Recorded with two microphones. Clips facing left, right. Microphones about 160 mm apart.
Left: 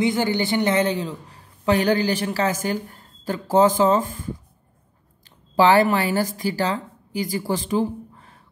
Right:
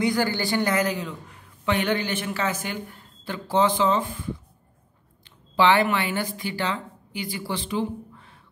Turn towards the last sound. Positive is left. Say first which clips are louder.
# left 5 dB
turn(degrees=45)  # may be behind; listen again after turning